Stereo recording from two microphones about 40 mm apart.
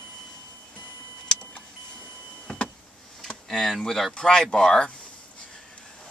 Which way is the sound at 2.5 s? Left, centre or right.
Left.